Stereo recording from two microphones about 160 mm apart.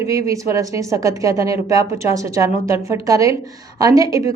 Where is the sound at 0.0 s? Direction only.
20° right (ahead or behind).